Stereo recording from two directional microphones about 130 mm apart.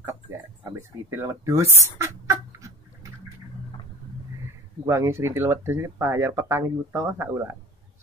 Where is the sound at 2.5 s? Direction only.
25° right (ahead or behind).